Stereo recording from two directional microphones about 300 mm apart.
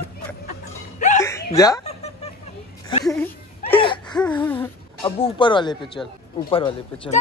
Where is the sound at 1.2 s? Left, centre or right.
Centre.